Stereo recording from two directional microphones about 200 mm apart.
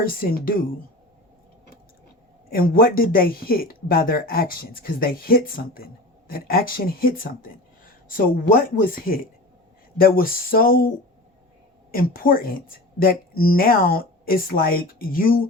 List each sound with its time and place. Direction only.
0.0 s speech: 45° left (ahead or behind)
2.5 s speech: 45° left (ahead or behind)